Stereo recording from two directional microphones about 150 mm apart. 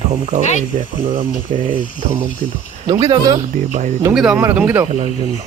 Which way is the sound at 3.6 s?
55° right (ahead or behind).